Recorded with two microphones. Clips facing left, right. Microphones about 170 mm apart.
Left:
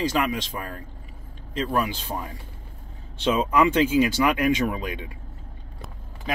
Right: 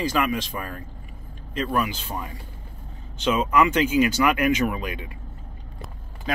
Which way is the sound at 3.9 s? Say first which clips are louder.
Even; 25° left (ahead or behind).